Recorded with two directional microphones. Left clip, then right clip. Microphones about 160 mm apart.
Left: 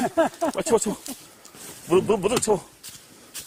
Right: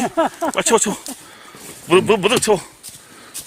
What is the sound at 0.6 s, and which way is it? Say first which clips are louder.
Speech: right 7 dB; 5° right (ahead or behind).